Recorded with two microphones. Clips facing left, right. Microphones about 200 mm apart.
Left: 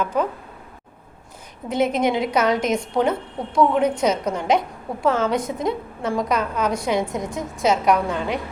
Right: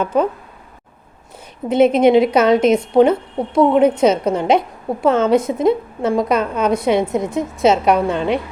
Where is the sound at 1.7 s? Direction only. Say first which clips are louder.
Right 9 dB; 25° right (ahead or behind).